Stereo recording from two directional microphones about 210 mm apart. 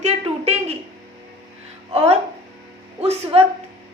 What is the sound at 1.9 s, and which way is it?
A woman's voice, 30° right (ahead or behind).